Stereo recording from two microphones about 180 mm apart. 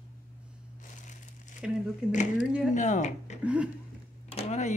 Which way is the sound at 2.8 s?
40° left (ahead or behind).